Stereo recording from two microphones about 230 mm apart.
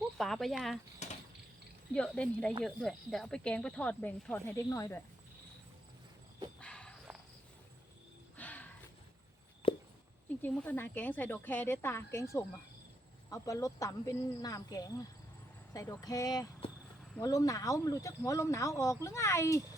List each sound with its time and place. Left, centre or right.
0.2 s speech: centre
1.0 s a sound: left
1.9 s speech: centre
6.6 s walk: centre
8.4 s horse: centre
9.6 s a sound: left
10.4 s speech: centre